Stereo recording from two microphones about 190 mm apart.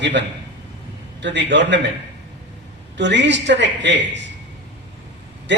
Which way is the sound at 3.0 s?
70° right (ahead or behind).